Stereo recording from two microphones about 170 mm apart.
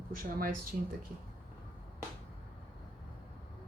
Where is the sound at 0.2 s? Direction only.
55° right (ahead or behind).